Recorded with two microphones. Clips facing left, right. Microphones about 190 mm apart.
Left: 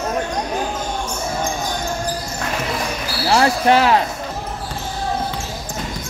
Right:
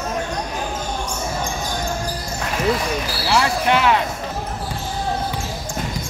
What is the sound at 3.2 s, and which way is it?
Speech, 40° left (ahead or behind).